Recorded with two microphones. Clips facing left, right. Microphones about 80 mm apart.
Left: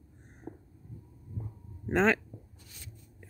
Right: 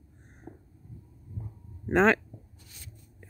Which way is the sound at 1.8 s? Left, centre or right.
Right.